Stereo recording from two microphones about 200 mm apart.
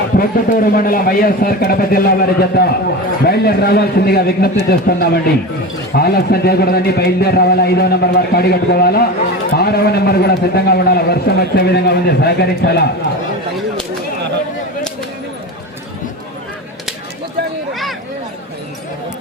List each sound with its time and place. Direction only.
0.2 s a man's voice: 45° left (ahead or behind)